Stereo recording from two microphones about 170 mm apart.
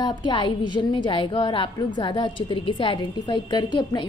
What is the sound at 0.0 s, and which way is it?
A woman's voice, 30° left (ahead or behind).